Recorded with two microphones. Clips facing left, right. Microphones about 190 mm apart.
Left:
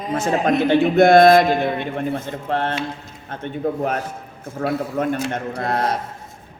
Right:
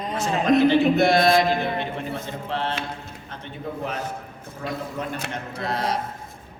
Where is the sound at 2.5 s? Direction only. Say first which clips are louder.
Left 6 dB; 50° left (ahead or behind).